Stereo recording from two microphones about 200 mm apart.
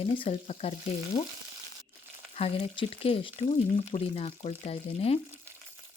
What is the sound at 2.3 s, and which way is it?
Speech, 30° left (ahead or behind).